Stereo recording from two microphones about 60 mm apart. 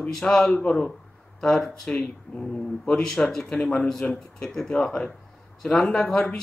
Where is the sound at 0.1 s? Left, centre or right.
Centre.